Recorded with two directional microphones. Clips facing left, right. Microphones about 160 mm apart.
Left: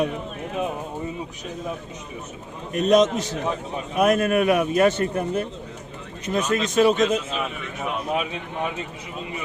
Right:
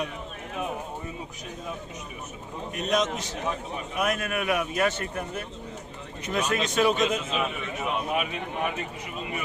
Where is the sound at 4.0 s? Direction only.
40° left (ahead or behind).